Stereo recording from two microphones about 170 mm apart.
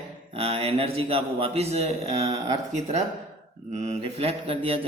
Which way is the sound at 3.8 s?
35° right (ahead or behind).